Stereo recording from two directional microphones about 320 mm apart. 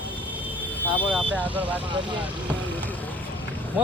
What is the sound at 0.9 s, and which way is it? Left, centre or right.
Speech, centre.